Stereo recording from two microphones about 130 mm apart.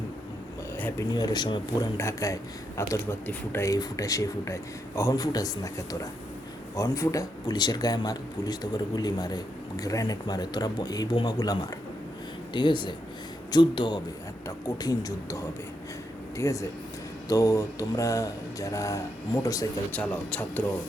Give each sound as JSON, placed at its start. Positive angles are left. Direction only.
{"t": 0.8, "sound": "speech", "side_deg": 15}
{"t": 1.1, "sound": "speech", "side_deg": 35}
{"t": 2.0, "sound": "a man's voice", "side_deg": 25}
{"t": 16.4, "sound": "a man's voice", "side_deg": 25}
{"t": 19.9, "sound": "a man's voice", "side_deg": 10}